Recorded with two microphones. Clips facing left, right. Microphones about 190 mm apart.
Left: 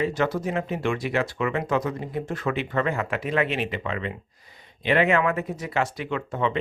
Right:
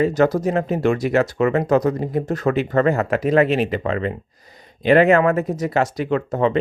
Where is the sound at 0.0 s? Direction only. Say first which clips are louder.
Right 8 dB; 40° right (ahead or behind).